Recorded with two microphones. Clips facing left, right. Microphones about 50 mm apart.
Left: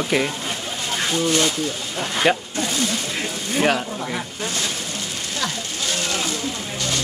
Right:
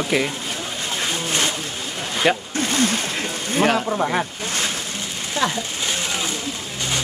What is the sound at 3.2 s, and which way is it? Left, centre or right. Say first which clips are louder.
Speech: right 1 dB; centre.